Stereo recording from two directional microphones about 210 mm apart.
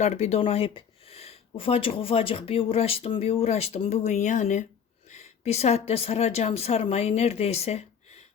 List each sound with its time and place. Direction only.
0.0 s a woman's voice: 30° left (ahead or behind)